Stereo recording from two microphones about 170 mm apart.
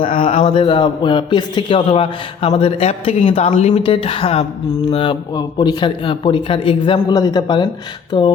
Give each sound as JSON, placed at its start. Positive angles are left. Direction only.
{"t": 0.0, "sound": "a man's voice", "side_deg": 30}